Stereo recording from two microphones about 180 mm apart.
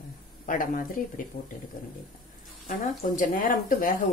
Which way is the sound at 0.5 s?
50° left (ahead or behind).